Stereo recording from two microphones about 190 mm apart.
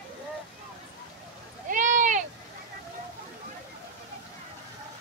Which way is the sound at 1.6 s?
45° right (ahead or behind).